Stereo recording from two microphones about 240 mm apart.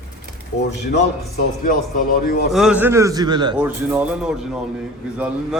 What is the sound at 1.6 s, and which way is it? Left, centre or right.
Speech, left.